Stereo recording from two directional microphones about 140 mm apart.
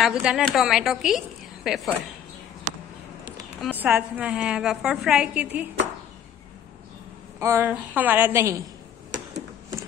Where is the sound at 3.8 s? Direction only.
10° right (ahead or behind).